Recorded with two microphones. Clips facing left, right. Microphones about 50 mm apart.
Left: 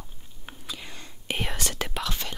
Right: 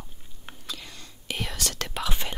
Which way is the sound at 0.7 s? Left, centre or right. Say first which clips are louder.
Left 2 dB; left.